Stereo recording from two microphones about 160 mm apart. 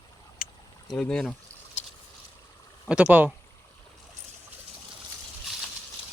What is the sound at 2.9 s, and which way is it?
Speech, 10° right (ahead or behind).